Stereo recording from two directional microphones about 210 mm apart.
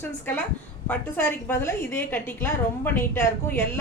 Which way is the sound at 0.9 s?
10° left (ahead or behind).